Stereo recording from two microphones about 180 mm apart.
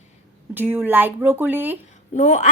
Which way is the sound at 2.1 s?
40° left (ahead or behind).